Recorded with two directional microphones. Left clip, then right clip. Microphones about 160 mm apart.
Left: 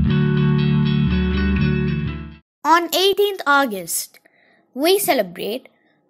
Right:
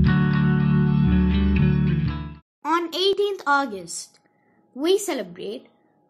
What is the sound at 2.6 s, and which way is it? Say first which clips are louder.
Speech: left 6 dB; 45° left (ahead or behind).